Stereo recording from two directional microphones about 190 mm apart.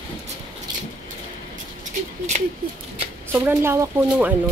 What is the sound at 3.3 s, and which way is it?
Speech, 10° right (ahead or behind).